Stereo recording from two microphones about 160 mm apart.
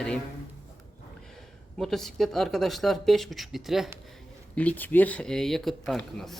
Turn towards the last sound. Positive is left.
turn(degrees=0)  # may be behind; listen again after turning